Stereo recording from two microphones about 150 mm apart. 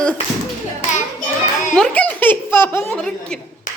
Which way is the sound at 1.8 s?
10° left (ahead or behind).